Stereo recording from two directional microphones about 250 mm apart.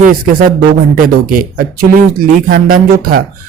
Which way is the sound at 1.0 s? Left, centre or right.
Right.